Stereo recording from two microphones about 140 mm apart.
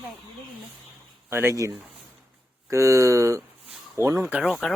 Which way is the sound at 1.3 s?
15° right (ahead or behind).